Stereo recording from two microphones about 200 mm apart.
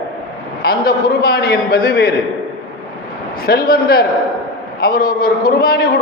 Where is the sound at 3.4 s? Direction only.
50° left (ahead or behind).